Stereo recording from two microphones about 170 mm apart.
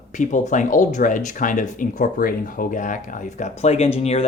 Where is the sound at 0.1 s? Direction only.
45° left (ahead or behind).